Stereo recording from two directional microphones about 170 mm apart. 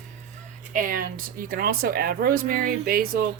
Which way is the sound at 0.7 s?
50° right (ahead or behind).